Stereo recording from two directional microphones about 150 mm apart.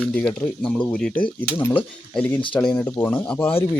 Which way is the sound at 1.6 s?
15° left (ahead or behind).